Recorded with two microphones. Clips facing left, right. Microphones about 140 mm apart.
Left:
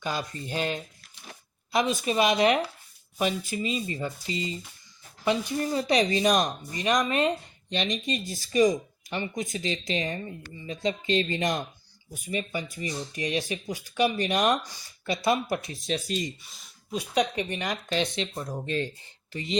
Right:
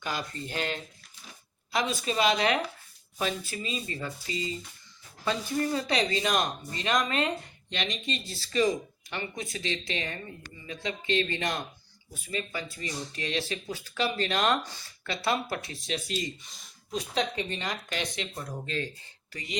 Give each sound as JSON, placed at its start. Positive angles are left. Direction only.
{"t": 0.0, "sound": "speech", "side_deg": 20}
{"t": 16.4, "sound": "speech", "side_deg": 5}
{"t": 17.2, "sound": "speech", "side_deg": 15}